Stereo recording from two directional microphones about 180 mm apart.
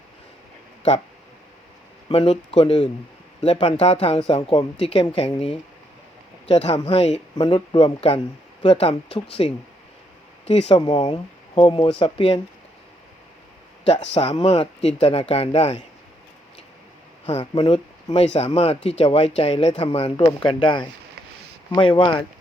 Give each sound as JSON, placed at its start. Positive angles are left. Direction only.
{"t": 2.0, "sound": "speech", "side_deg": 35}
{"t": 13.8, "sound": "speech", "side_deg": 35}
{"t": 17.5, "sound": "speech", "side_deg": 30}